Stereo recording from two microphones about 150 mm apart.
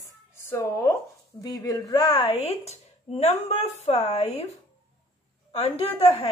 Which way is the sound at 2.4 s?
45° left (ahead or behind).